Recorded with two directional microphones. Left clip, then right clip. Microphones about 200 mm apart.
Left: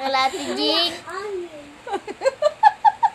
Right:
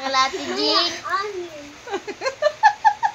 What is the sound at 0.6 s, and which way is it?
Speech, 40° left (ahead or behind).